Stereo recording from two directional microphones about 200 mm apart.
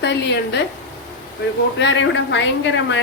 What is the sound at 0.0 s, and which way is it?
Dishes, 60° left (ahead or behind).